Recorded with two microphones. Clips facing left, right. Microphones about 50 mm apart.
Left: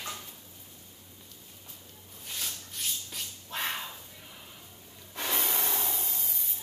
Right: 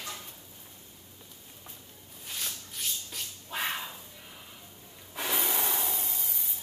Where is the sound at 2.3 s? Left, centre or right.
Centre.